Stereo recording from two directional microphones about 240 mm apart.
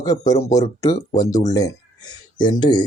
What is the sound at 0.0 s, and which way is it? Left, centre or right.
Speech, centre.